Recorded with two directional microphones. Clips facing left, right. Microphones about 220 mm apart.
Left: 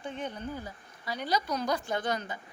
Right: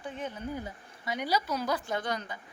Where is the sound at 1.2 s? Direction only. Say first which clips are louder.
Left 1 dB; 5° right (ahead or behind).